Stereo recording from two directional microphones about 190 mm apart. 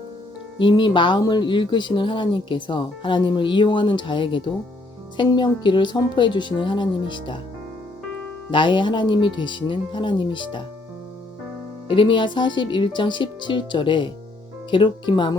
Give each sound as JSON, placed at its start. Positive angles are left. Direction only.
{"t": 0.6, "sound": "speech", "side_deg": 25}
{"t": 8.4, "sound": "speech", "side_deg": 25}
{"t": 11.9, "sound": "speech", "side_deg": 25}